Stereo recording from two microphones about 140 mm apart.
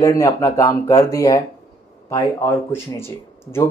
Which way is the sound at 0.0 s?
25° left (ahead or behind).